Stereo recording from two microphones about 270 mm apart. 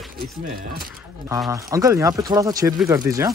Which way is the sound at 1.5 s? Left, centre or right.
Centre.